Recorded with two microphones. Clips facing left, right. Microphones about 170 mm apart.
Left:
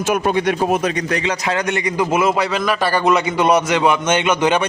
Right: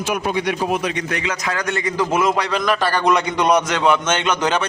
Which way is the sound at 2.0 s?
10° left (ahead or behind).